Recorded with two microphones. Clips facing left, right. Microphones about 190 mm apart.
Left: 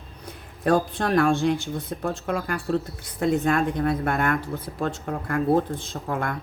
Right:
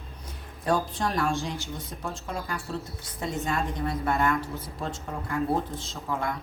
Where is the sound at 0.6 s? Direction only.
60° left (ahead or behind).